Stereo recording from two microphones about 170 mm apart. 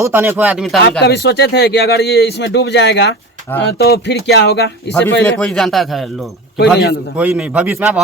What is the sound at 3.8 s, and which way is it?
Speech, 80° left.